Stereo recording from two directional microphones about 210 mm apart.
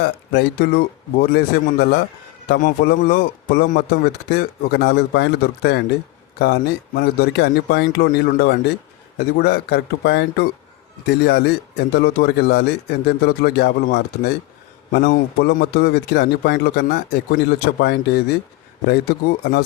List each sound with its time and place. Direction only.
0.0 s speech: 50° left (ahead or behind)